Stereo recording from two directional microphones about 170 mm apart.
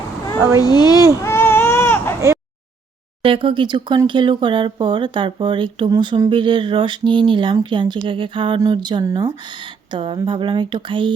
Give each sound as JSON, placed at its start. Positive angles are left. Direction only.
{"t": 0.3, "sound": "a child's voice", "side_deg": -15}
{"t": 0.6, "sound": "a child's voice", "side_deg": 25}
{"t": 0.9, "sound": "speech", "side_deg": -15}
{"t": 1.2, "sound": "baby cry", "side_deg": 15}
{"t": 3.2, "sound": "speech", "side_deg": -30}